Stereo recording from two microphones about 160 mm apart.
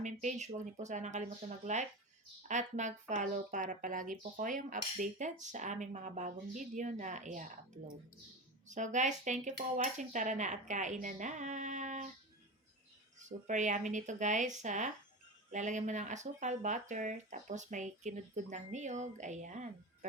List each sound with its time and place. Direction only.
0.0 s speech: 50° right (ahead or behind)
8.6 s speech: 50° right (ahead or behind)
13.1 s speech: 50° right (ahead or behind)